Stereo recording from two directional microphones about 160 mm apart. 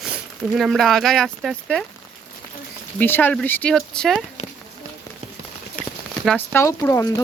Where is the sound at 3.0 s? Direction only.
10° left (ahead or behind).